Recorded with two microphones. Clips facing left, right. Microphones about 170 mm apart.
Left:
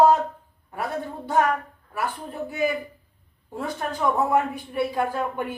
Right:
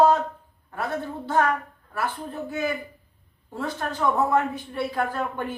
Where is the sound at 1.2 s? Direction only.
15° left (ahead or behind).